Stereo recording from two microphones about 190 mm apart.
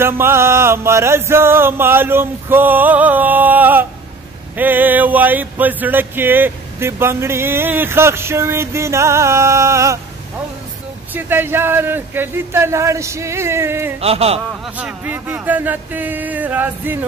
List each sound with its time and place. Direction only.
0.0 s music: 15° right (ahead or behind)
11.1 s music: 10° right (ahead or behind)
14.0 s speech: 30° right (ahead or behind)
14.8 s music: 10° right (ahead or behind)